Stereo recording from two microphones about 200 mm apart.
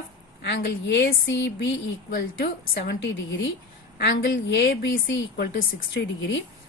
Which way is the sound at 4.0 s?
60° left (ahead or behind).